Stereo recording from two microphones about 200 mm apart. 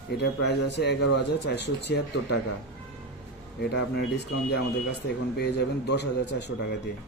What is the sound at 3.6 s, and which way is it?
Speech, 55° left (ahead or behind).